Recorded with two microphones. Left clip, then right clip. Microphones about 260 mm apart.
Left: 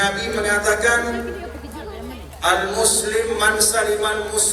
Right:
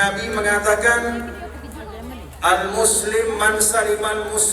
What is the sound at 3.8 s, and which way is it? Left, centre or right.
Speech, right.